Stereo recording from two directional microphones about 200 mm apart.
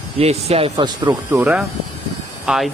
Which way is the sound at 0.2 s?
30° right (ahead or behind).